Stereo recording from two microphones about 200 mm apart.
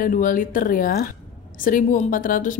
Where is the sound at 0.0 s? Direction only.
45° left (ahead or behind).